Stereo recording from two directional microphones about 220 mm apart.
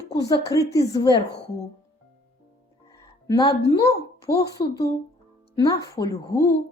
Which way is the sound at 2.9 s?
15° left (ahead or behind).